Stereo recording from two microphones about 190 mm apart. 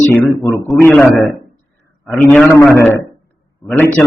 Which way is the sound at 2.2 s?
10° left (ahead or behind).